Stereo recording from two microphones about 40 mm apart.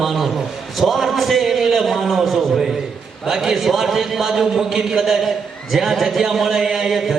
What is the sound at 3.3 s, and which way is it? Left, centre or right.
A man's voice, centre.